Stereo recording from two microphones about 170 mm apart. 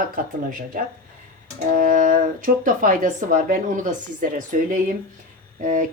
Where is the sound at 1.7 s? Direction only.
55° right (ahead or behind).